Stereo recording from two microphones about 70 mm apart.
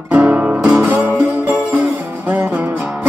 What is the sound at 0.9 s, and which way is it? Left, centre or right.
Music, right.